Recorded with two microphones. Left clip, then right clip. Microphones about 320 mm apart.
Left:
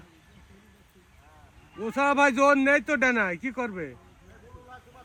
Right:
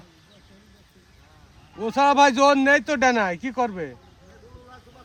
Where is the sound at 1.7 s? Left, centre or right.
Right.